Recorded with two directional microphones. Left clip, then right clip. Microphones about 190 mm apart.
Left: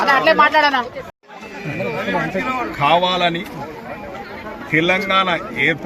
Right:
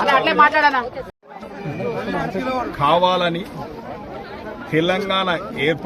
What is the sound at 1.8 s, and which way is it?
Chatter, 35° left (ahead or behind).